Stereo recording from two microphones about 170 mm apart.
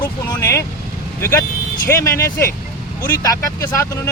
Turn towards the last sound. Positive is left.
turn(degrees=15)  # may be behind; listen again after turning